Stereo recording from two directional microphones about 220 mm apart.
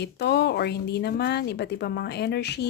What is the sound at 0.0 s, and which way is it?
A woman's voice, 50° left (ahead or behind).